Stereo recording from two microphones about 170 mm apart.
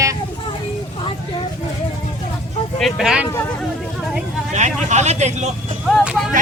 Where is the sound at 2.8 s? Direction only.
Centre (ahead or behind).